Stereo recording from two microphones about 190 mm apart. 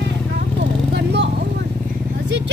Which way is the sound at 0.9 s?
65° right (ahead or behind).